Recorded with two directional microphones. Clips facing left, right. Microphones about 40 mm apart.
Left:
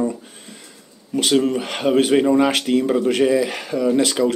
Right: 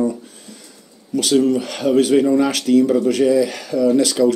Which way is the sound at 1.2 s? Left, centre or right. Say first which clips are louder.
Right 2 dB; left.